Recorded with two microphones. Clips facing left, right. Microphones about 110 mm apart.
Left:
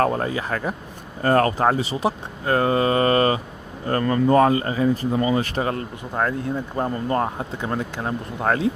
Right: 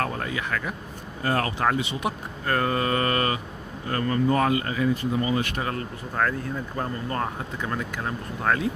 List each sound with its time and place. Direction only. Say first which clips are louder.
0.0 s speech: left 7 dB; 35° left (ahead or behind)